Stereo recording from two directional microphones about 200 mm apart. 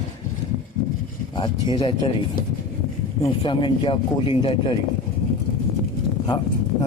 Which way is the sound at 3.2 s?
25° left (ahead or behind).